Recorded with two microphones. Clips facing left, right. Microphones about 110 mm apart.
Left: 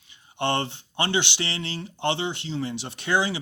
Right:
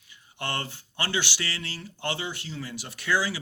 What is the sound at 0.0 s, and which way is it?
A man's voice, 25° left (ahead or behind).